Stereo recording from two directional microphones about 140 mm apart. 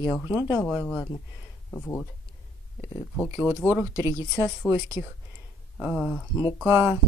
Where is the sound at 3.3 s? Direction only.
20° right (ahead or behind).